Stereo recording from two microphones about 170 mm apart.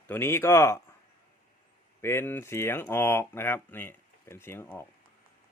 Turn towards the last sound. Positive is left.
turn(degrees=15)  # may be behind; listen again after turning